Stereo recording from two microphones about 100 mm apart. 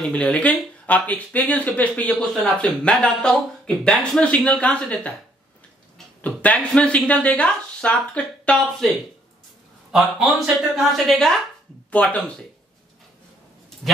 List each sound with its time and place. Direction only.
0.0 s speech: 10° left (ahead or behind)
6.2 s speech: 15° left (ahead or behind)
11.9 s speech: 15° left (ahead or behind)